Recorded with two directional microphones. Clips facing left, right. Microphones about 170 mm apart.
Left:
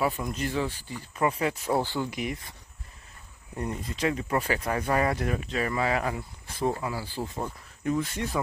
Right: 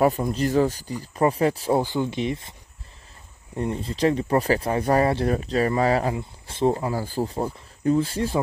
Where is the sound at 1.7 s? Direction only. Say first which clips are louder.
Right 5 dB; 20° right (ahead or behind).